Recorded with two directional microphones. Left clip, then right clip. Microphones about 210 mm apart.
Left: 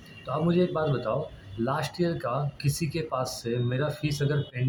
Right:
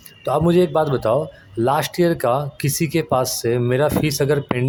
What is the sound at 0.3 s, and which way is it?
Speech, 45° right (ahead or behind).